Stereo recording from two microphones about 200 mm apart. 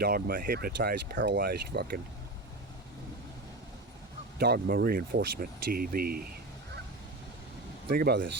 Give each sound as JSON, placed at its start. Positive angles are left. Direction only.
{"t": 0.0, "sound": "speech", "side_deg": -45}
{"t": 1.4, "sound": "speech", "side_deg": -50}
{"t": 4.4, "sound": "speech", "side_deg": -55}
{"t": 7.9, "sound": "speech", "side_deg": -50}